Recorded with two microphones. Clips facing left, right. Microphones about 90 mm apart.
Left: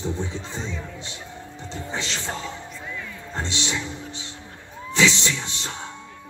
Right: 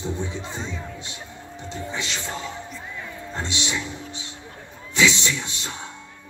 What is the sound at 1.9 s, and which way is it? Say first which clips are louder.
Speech: left 2 dB; 30° left (ahead or behind).